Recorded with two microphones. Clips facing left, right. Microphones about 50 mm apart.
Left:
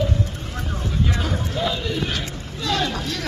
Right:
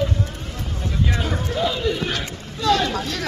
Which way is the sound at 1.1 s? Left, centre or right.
Centre.